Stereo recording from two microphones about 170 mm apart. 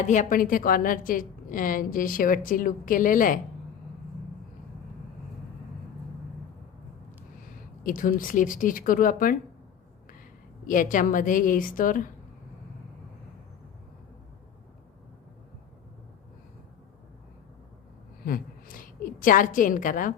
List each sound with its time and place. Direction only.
0.1 s a woman's voice: 50° left (ahead or behind)
7.9 s a woman's voice: 50° left (ahead or behind)
10.7 s a woman's voice: 50° left (ahead or behind)
18.3 s a woman's voice: 55° left (ahead or behind)